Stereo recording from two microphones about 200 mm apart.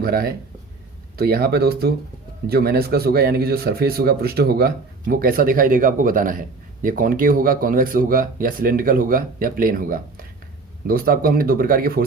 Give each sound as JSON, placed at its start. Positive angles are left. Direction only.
{"t": 0.0, "sound": "speech", "side_deg": -50}